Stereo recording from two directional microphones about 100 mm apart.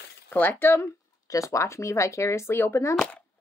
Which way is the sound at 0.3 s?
20° left (ahead or behind).